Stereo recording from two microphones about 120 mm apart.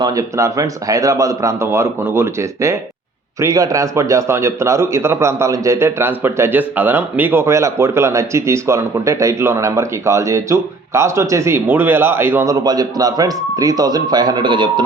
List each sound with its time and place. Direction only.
0.0 s a man's voice: 30° right (ahead or behind)
12.5 s a man's voice: 35° right (ahead or behind)